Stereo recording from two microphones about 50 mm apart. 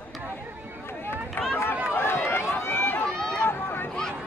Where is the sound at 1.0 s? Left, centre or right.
Left.